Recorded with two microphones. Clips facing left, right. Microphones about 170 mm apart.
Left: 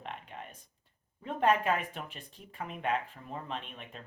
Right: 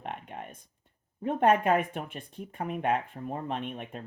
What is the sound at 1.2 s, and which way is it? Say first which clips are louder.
Speech: right 4 dB; 50° right (ahead or behind).